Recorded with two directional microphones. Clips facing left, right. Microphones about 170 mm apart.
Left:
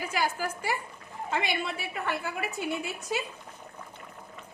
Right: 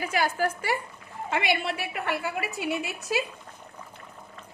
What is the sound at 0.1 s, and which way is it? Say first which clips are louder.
A woman's voice: right 5 dB; 65° right (ahead or behind).